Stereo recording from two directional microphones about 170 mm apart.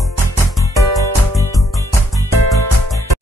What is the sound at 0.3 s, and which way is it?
Music, 20° left (ahead or behind).